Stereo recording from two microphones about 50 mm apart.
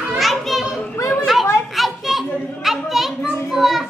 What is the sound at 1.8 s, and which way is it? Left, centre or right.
A woman's voice, centre.